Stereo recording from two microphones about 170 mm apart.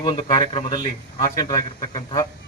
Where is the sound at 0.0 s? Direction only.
25° left (ahead or behind).